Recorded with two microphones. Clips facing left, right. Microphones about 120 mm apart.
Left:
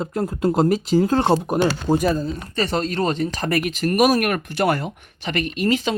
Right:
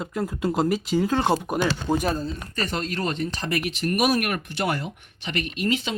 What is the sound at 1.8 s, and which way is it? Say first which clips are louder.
Speech: left 5 dB; 40° left (ahead or behind).